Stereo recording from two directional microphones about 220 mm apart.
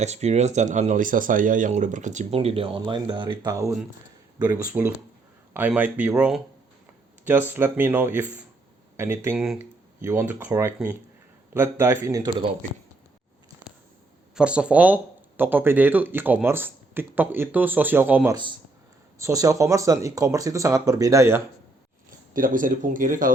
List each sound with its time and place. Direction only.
0.0 s speech: 30° right (ahead or behind)
14.3 s speech: 5° right (ahead or behind)
22.3 s speech: 40° right (ahead or behind)